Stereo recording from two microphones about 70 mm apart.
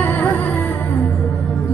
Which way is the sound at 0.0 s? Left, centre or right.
Left.